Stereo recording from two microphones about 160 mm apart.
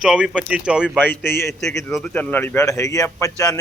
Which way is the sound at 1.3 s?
15° left (ahead or behind).